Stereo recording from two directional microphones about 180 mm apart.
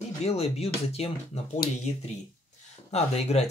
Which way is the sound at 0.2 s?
35° left (ahead or behind).